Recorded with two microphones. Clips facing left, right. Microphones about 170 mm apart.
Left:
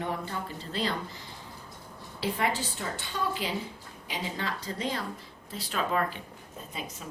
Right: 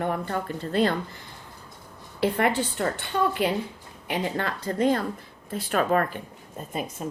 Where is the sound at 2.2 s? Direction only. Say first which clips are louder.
Right 7 dB; 60° right (ahead or behind).